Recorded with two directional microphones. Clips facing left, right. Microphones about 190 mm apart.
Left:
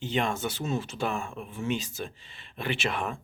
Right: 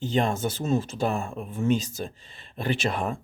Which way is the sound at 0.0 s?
40° right (ahead or behind).